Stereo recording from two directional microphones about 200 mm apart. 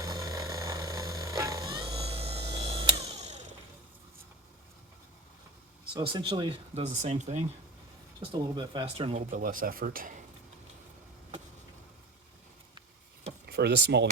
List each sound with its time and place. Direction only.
0.0 s vehicle: 15° right (ahead or behind); by 3.5 s 35° right (ahead or behind)
5.9 s speech: 25° right (ahead or behind)
6.9 s speech: 35° right (ahead or behind)
9.0 s speech: 35° right (ahead or behind)
13.5 s speech: 55° right (ahead or behind)